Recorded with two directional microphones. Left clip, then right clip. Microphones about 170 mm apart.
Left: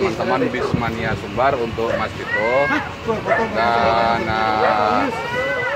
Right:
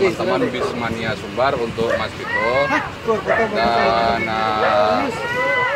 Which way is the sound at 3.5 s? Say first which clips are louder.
Left 1 dB; 30° left (ahead or behind).